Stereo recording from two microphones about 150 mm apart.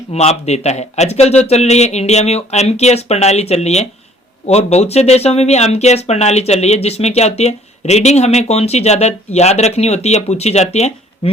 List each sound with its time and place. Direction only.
0.1 s speech: 45° left (ahead or behind)